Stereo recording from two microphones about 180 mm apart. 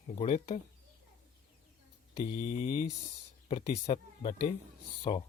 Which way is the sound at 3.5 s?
35° left (ahead or behind).